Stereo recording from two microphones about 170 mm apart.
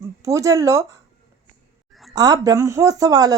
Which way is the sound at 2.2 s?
20° right (ahead or behind).